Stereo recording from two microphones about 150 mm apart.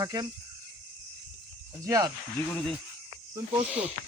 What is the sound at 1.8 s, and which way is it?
Speech, 25° right (ahead or behind).